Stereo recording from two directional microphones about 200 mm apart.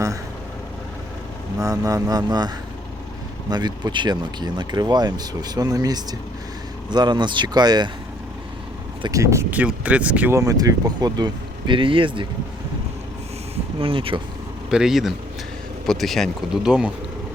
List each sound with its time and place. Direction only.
1.5 s speech: 15° right (ahead or behind)
3.5 s speech: 20° right (ahead or behind)
9.0 s speech: 20° right (ahead or behind)
13.7 s speech: 25° right (ahead or behind)
14.7 s speech: centre (ahead or behind)